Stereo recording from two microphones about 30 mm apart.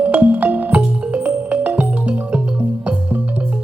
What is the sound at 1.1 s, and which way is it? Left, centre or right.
Music, right.